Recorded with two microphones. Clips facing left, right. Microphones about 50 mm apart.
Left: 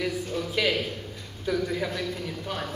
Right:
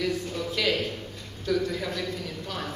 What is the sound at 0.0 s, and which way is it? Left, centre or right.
A man's voice, centre.